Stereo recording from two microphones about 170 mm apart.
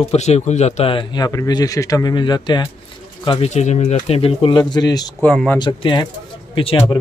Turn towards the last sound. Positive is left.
turn(degrees=30)  # may be behind; listen again after turning